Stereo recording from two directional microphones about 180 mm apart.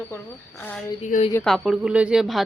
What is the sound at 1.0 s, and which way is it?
Speech, 40° left (ahead or behind).